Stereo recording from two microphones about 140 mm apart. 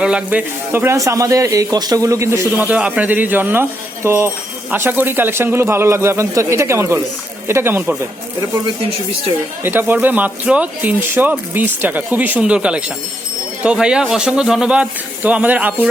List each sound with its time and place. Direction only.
0.0 s speech: 5° right (ahead or behind)
2.6 s speech: 10° right (ahead or behind)
9.6 s speech: 15° right (ahead or behind)